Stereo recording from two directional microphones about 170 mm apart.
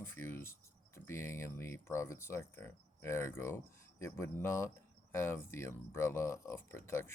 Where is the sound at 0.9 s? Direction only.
15° left (ahead or behind).